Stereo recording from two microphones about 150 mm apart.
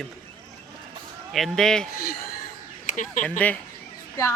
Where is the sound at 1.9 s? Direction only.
85° left.